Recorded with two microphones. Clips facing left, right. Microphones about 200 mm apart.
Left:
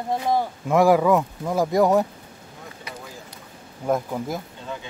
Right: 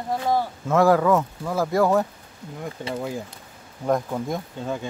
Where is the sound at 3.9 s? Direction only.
5° left (ahead or behind).